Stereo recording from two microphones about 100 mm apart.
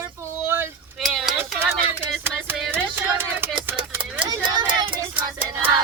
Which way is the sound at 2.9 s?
25° right (ahead or behind).